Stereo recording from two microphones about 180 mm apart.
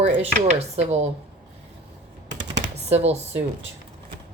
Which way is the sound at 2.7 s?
35° right (ahead or behind).